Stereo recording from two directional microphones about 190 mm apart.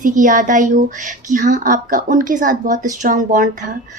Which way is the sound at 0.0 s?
45° right (ahead or behind).